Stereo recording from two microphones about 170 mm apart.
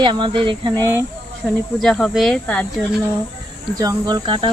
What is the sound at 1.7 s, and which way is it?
Speech, centre (ahead or behind).